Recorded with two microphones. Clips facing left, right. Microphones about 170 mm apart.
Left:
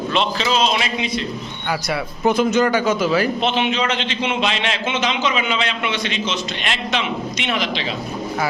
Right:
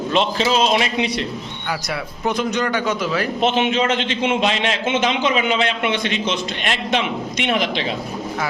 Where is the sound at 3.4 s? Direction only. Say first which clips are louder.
Right 2 dB; 50° right (ahead or behind).